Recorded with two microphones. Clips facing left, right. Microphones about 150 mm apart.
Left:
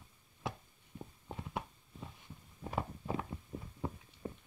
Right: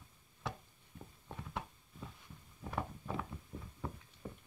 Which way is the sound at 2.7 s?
20° left (ahead or behind).